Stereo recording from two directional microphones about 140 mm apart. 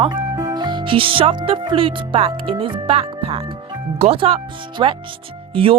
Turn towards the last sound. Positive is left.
turn(degrees=-40)  # may be behind; listen again after turning